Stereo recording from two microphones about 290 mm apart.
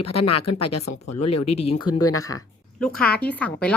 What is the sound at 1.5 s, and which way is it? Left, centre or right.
Speech, left.